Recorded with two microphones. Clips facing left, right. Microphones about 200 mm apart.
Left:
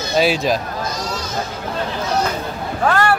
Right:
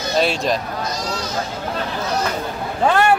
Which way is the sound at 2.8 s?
20° right (ahead or behind).